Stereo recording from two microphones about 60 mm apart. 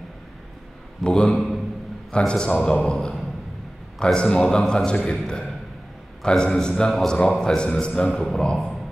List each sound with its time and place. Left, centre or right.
1.0 s a man's voice: centre